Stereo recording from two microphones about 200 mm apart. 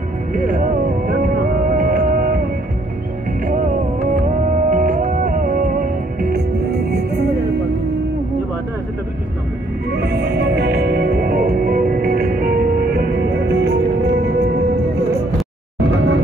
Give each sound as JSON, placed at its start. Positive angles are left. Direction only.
{"t": 0.3, "sound": "music", "side_deg": -45}
{"t": 3.4, "sound": "music", "side_deg": -40}
{"t": 9.9, "sound": "music", "side_deg": -50}